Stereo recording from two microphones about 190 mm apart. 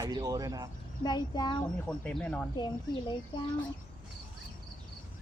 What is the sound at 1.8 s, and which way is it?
Speech, 5° left (ahead or behind).